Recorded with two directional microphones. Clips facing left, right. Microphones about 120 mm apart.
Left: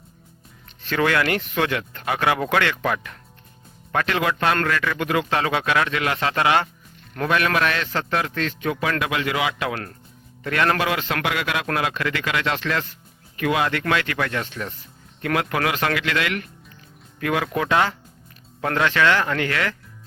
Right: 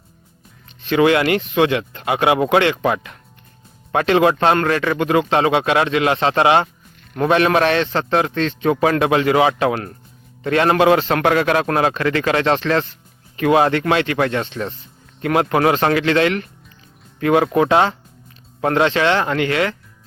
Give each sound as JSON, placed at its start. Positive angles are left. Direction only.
{"t": 0.8, "sound": "a man's voice", "side_deg": -20}